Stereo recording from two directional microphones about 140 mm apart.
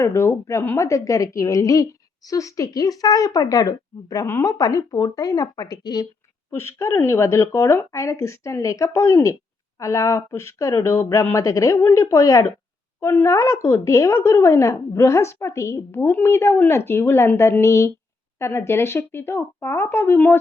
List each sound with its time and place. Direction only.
0.0 s a woman's voice: 20° left (ahead or behind)